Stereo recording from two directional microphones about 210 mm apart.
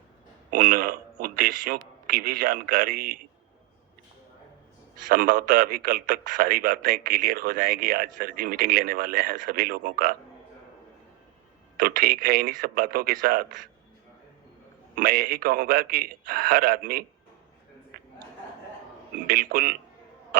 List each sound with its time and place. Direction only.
0.5 s a man's voice: 45° right (ahead or behind)
5.0 s a man's voice: 40° right (ahead or behind)
11.8 s a man's voice: 45° right (ahead or behind)
14.9 s a man's voice: 45° right (ahead or behind)
17.9 s a sound: 45° right (ahead or behind)
19.3 s a man's voice: 45° right (ahead or behind)